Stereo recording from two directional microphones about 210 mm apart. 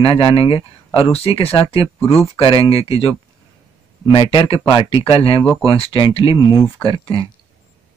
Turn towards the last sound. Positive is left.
turn(degrees=25)  # may be behind; listen again after turning